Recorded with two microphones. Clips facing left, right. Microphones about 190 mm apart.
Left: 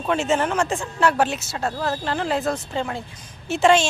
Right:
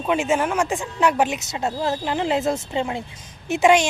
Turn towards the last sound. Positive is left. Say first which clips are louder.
# right 1 dB
turn(degrees=-15)  # may be behind; listen again after turning